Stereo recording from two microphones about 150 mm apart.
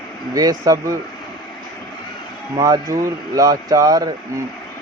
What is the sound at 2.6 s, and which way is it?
Speech, 25° right (ahead or behind).